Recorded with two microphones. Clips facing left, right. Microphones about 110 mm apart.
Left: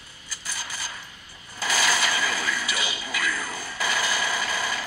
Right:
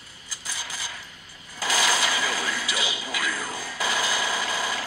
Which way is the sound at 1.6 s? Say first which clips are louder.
Even; 20° right (ahead or behind).